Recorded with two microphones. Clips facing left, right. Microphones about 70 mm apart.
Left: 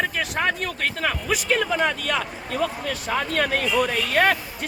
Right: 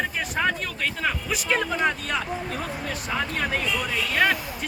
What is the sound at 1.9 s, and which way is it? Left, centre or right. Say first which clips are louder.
Speech: left 2 dB; left.